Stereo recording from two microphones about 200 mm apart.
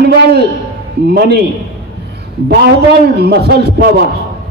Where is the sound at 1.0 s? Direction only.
55° right (ahead or behind).